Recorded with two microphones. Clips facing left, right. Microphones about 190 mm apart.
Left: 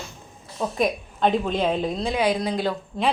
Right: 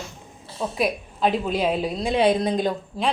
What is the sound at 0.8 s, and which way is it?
A woman's voice, 5° right (ahead or behind).